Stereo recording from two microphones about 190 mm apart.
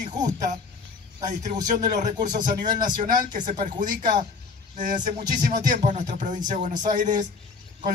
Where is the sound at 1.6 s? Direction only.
40° right (ahead or behind).